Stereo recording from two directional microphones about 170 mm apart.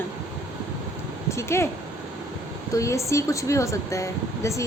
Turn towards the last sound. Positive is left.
turn(degrees=15)  # may be behind; listen again after turning